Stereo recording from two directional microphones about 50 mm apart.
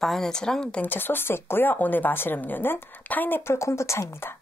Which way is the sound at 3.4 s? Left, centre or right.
Left.